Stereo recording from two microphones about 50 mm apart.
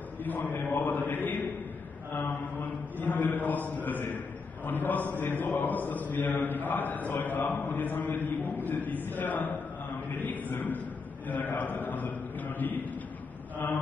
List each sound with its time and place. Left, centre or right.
0.2 s a man's voice: left